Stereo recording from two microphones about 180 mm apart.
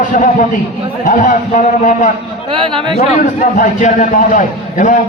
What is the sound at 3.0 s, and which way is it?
A man's voice, 45° left (ahead or behind).